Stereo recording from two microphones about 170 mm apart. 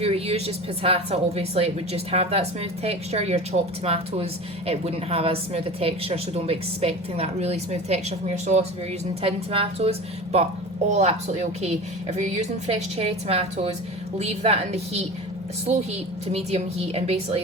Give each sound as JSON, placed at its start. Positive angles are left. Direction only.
{"t": 0.0, "sound": "speech", "side_deg": -35}